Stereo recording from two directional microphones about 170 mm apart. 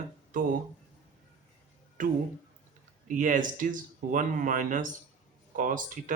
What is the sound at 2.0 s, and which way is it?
Speech, 50° right (ahead or behind).